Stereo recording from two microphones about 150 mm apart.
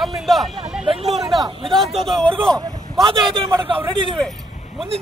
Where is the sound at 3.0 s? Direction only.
30° right (ahead or behind).